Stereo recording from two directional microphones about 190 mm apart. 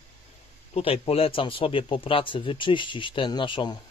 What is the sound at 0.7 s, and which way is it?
Speech, 30° left (ahead or behind).